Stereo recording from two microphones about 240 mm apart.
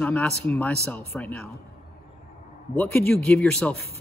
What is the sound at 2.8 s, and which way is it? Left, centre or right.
Speech, centre.